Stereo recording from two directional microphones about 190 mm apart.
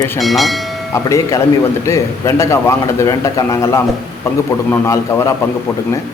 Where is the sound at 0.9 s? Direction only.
15° left (ahead or behind).